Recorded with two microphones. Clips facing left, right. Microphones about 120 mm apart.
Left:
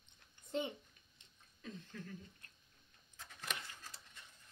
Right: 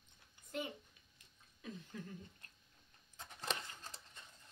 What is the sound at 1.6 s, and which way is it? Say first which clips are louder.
Speech: right 1 dB; 15° right (ahead or behind).